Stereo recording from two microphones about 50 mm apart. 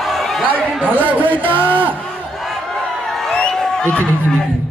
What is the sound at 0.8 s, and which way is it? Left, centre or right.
Speech, right.